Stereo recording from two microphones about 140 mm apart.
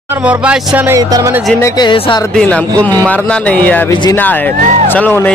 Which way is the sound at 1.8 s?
35° left (ahead or behind).